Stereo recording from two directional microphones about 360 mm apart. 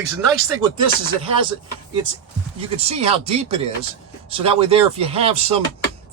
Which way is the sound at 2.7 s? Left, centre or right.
Centre.